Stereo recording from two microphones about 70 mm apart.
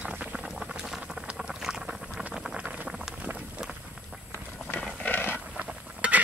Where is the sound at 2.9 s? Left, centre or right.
Centre.